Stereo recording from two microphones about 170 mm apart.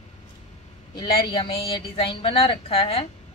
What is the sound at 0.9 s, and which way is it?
Speech, 25° left (ahead or behind).